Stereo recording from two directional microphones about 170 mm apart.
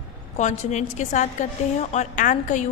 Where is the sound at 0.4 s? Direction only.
45° left (ahead or behind).